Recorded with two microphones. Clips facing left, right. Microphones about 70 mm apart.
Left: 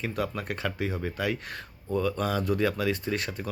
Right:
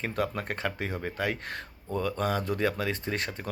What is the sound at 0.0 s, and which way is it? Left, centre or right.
Speech, right.